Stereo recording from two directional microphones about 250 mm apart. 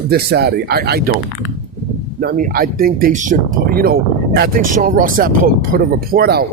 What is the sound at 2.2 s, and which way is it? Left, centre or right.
Speech, right.